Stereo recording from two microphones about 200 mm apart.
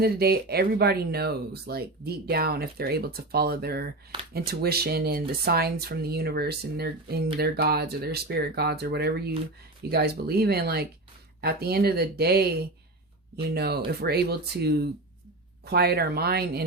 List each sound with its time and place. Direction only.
0.0 s speech: 50° right (ahead or behind)